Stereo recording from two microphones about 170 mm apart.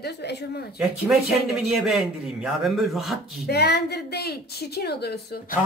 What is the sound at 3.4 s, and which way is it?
A woman's voice, 75° left (ahead or behind).